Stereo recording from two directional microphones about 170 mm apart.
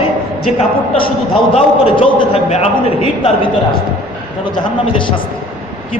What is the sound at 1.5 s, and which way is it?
A man's voice, 30° left (ahead or behind).